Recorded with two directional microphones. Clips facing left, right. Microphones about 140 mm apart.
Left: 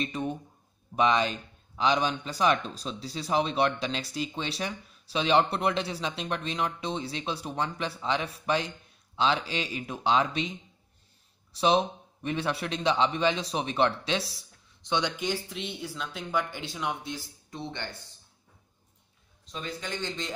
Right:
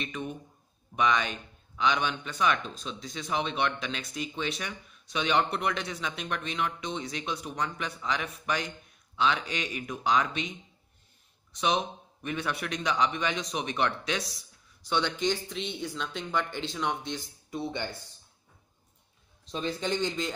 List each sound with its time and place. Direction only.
0.0 s speech: 35° left (ahead or behind)
11.5 s speech: 30° left (ahead or behind)
14.9 s speech: 15° left (ahead or behind)
17.5 s speech: 10° right (ahead or behind)
19.5 s a man's voice: 25° right (ahead or behind)